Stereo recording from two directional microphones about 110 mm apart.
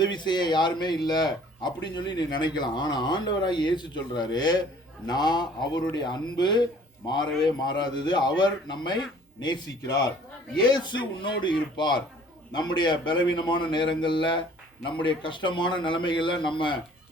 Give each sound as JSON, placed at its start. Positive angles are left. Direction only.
{"t": 0.0, "sound": "speech", "side_deg": 40}